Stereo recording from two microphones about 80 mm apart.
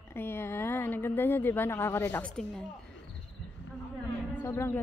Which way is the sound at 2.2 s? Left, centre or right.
Centre.